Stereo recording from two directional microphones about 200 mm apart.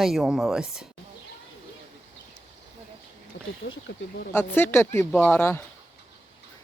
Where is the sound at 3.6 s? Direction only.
60° left (ahead or behind).